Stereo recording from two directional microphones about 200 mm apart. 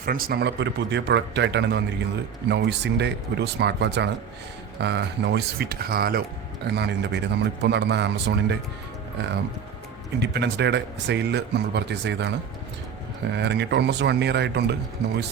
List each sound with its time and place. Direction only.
0.0 s speech: 45° right (ahead or behind)
10.2 s speech: 60° right (ahead or behind)
13.3 s speech: 55° right (ahead or behind)